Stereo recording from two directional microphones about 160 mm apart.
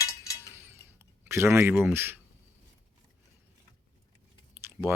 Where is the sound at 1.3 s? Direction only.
15° right (ahead or behind).